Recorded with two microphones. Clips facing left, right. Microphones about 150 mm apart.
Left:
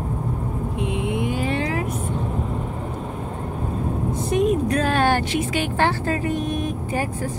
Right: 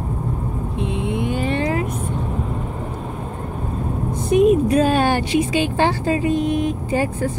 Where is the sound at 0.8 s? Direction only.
5° left (ahead or behind).